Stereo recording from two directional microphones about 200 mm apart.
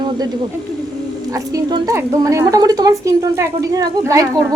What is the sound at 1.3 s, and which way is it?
A woman's voice, 20° right (ahead or behind).